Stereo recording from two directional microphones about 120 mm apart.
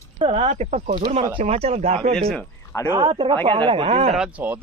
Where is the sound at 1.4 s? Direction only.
60° right (ahead or behind).